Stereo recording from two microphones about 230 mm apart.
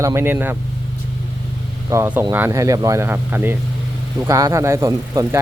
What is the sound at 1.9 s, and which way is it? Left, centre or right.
Speech, centre.